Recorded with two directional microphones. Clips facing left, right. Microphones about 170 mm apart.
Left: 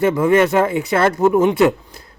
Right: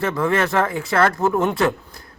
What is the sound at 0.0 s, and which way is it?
A man's voice, 20° left (ahead or behind).